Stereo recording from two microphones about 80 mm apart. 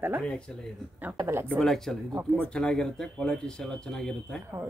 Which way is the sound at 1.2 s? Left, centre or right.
Right.